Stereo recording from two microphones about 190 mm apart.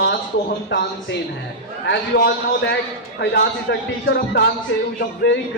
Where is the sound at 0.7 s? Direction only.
75° left (ahead or behind).